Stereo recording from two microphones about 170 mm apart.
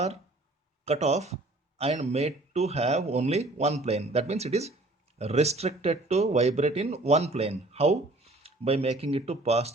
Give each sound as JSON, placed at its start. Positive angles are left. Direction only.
{"t": 0.9, "sound": "speech", "side_deg": -40}